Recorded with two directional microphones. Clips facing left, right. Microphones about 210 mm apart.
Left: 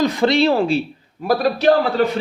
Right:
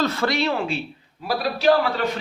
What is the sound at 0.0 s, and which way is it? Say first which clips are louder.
Speech: left 6 dB; 15° left (ahead or behind).